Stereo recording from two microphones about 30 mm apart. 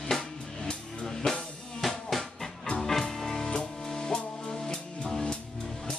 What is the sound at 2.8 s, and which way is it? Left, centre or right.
Music, centre.